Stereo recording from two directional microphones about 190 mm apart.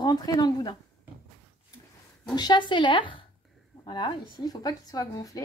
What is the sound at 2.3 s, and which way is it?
A woman's voice, 25° left (ahead or behind).